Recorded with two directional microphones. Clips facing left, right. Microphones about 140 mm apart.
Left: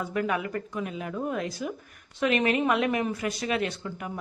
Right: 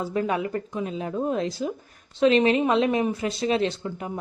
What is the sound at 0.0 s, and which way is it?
Speech, 30° right (ahead or behind).